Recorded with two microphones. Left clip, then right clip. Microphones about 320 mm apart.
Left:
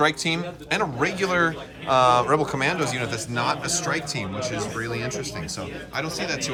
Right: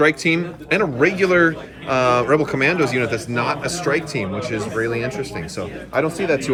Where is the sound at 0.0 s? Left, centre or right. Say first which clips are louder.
Right 5 dB; centre.